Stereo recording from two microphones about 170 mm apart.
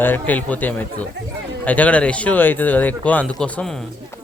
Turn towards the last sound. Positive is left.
turn(degrees=5)  # may be behind; listen again after turning